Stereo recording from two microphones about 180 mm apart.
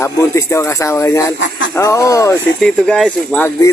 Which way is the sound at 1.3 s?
85° left.